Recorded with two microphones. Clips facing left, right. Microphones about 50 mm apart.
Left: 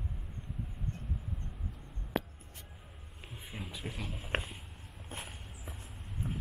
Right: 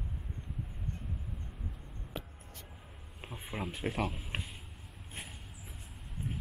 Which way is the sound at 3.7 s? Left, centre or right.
Right.